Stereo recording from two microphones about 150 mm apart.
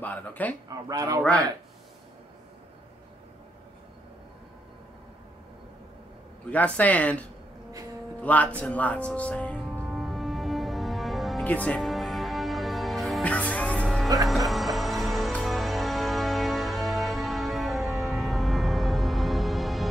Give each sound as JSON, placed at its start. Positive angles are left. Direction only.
{"t": 0.0, "sound": "speech", "side_deg": 10}
{"t": 0.7, "sound": "speech", "side_deg": -25}
{"t": 6.5, "sound": "speech", "side_deg": 10}
{"t": 9.8, "sound": "music", "side_deg": 0}
{"t": 14.0, "sound": "speech", "side_deg": -25}
{"t": 14.3, "sound": "music", "side_deg": 0}